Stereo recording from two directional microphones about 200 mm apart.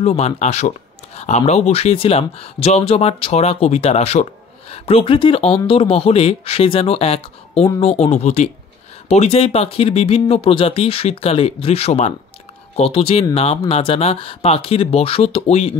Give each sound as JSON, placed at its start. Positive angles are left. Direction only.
{"t": 0.0, "sound": "speech", "side_deg": 35}